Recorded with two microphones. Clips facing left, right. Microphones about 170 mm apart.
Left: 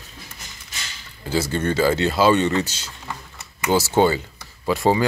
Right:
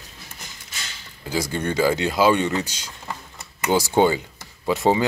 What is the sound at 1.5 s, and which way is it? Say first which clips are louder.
Speech: left 1 dB; 10° right (ahead or behind).